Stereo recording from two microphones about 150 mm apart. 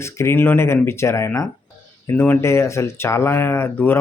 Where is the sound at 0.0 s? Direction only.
15° left (ahead or behind).